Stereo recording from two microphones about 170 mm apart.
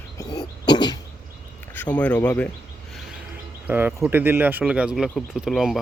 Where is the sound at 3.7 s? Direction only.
10° right (ahead or behind).